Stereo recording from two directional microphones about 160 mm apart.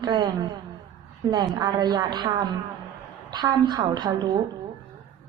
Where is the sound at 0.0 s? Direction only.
25° right (ahead or behind).